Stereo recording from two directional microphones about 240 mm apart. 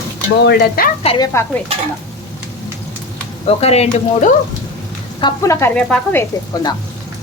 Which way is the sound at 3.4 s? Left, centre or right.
Left.